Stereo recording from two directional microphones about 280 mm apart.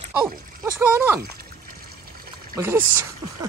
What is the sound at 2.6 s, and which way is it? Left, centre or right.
Speech, centre.